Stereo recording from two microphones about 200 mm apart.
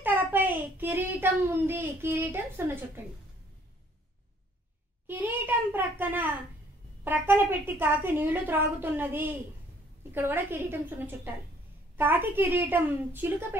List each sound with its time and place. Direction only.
0.0 s a child's voice: 10° right (ahead or behind)
5.0 s a child's voice: 10° right (ahead or behind)